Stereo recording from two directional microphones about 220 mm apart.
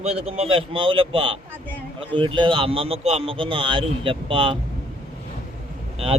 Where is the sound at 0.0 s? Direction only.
30° right (ahead or behind).